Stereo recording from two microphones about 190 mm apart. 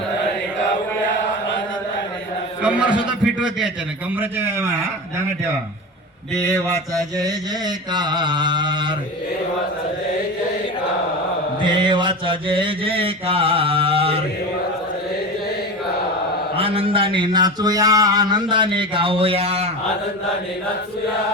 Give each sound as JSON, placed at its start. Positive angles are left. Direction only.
{"t": 2.6, "sound": "a man's voice", "side_deg": -5}
{"t": 6.3, "sound": "a sound", "side_deg": 10}
{"t": 6.9, "sound": "speech", "side_deg": -20}
{"t": 11.6, "sound": "speech", "side_deg": -25}
{"t": 16.6, "sound": "speech", "side_deg": -30}